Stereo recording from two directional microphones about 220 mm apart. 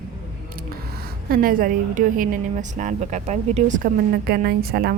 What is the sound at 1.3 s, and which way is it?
A woman's voice, 40° right (ahead or behind).